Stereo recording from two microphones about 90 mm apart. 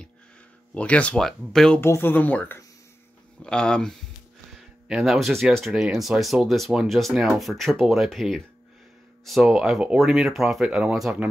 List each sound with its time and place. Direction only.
0.7 s speech: 15° left (ahead or behind)
1.2 s speech: 5° left (ahead or behind)
1.8 s speech: 25° left (ahead or behind)
3.4 s speech: 10° left (ahead or behind)
4.8 s speech: 5° right (ahead or behind)